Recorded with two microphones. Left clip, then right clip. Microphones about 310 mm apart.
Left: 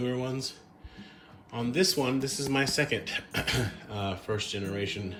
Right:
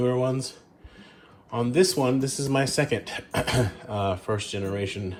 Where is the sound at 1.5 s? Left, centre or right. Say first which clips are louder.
Right 5 dB; centre.